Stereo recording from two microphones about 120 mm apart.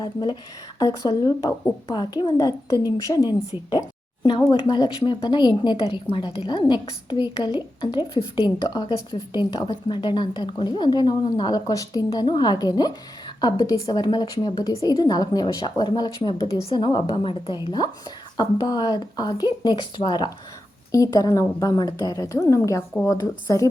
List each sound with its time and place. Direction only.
0.0 s a woman's voice: 35° left (ahead or behind)
3.7 s a sound: 35° left (ahead or behind)
4.6 s a woman's voice: 40° left (ahead or behind)
20.9 s a woman's voice: 30° left (ahead or behind)